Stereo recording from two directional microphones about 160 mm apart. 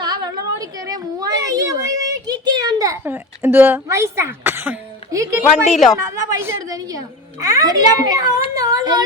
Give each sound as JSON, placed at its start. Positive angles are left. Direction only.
{"t": 0.0, "sound": "a sound", "side_deg": -25}
{"t": 3.0, "sound": "speech", "side_deg": -15}
{"t": 5.7, "sound": "a woman's voice", "side_deg": 0}
{"t": 6.4, "sound": "a child's voice", "side_deg": -20}